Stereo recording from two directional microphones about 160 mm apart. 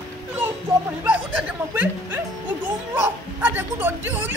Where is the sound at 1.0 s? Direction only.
10° right (ahead or behind).